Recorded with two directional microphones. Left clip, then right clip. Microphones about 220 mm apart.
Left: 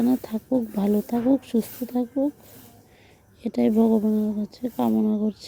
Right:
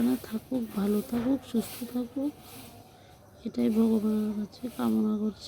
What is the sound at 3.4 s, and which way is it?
Speech, 20° left (ahead or behind).